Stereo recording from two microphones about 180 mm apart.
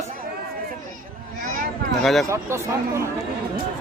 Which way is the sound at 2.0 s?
Centre (ahead or behind).